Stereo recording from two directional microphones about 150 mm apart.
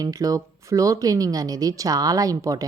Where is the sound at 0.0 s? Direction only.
25° right (ahead or behind).